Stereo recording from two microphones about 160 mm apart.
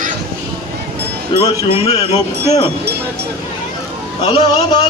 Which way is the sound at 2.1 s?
20° left (ahead or behind).